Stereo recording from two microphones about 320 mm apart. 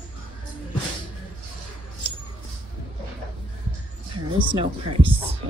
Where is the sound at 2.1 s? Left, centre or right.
Centre.